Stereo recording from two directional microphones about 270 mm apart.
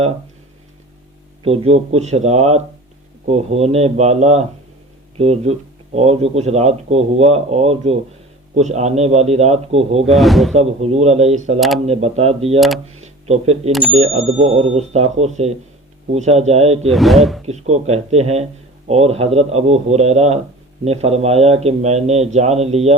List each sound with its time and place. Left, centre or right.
1.5 s speech: right
10.0 s speech: centre
10.6 s speech: right
12.5 s speech: centre
13.0 s speech: right
16.9 s speech: centre
17.4 s speech: right